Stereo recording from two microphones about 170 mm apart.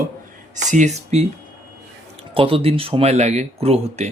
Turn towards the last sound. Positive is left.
turn(degrees=-35)  # may be behind; listen again after turning